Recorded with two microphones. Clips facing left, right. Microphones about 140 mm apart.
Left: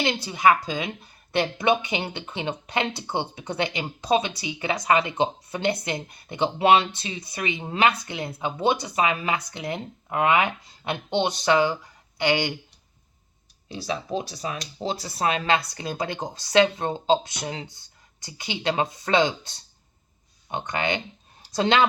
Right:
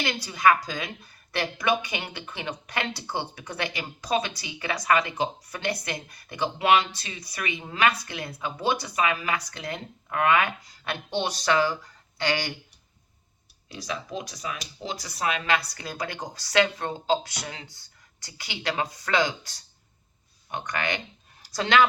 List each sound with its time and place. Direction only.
0.0 s speech: 25° left (ahead or behind)
13.7 s a woman's voice: 30° left (ahead or behind)